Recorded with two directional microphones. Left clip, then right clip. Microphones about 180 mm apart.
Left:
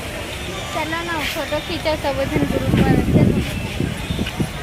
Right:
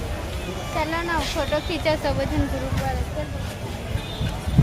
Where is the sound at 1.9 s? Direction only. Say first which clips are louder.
Left 1 dB; 20° left (ahead or behind).